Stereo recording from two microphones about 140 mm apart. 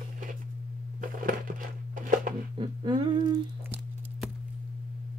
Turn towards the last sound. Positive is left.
turn(degrees=-35)  # may be behind; listen again after turning